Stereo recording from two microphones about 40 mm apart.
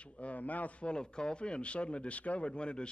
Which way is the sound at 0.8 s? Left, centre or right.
Left.